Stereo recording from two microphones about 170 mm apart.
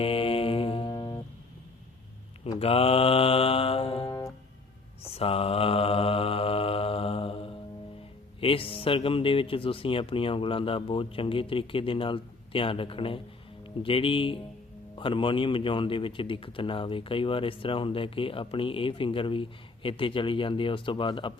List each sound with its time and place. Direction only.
0.0 s music: 35° left (ahead or behind)
2.6 s mantra: 35° left (ahead or behind)
8.4 s speech: 35° left (ahead or behind)